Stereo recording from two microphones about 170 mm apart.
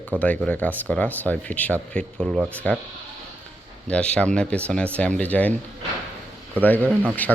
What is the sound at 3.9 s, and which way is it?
Speech, 5° left (ahead or behind).